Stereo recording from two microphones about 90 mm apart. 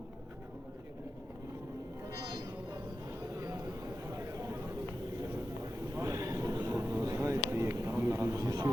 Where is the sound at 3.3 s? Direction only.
35° right (ahead or behind).